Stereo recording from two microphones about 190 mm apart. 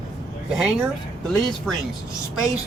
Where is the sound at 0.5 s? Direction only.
Centre (ahead or behind).